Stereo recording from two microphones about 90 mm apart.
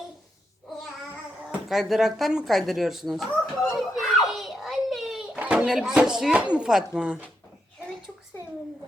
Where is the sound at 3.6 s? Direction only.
Centre (ahead or behind).